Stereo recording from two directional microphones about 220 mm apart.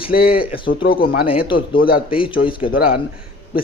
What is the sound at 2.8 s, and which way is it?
Speech, 40° left (ahead or behind).